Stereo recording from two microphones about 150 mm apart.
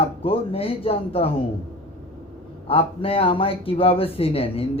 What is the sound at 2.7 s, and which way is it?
Speech, 40° left (ahead or behind).